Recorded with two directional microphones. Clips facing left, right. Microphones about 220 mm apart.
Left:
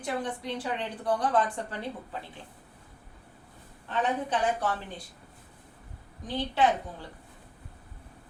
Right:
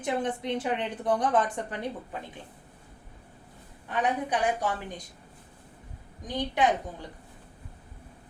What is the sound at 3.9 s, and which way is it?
Speech, 15° right (ahead or behind).